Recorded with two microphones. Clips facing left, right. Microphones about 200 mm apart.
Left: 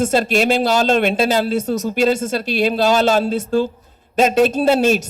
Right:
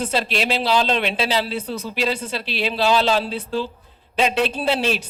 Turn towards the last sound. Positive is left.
turn(degrees=45)  # may be behind; listen again after turning